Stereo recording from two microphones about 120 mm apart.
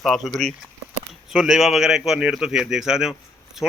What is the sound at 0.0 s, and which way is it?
A man's voice, 5° left (ahead or behind).